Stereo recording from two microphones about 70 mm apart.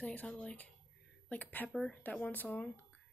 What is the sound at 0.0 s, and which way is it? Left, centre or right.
Speech, left.